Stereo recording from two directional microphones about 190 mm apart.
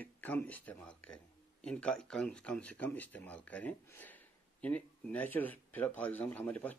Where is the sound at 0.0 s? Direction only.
10° left (ahead or behind).